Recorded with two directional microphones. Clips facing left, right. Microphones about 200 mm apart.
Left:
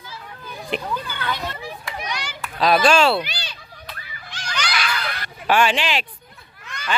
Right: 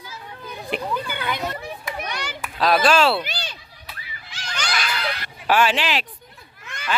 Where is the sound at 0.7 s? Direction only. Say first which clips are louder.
Right 1 dB; 15° right (ahead or behind).